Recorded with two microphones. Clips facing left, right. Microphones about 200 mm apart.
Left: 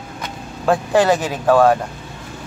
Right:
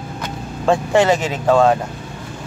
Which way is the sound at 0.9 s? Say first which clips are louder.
Even; 20° right (ahead or behind).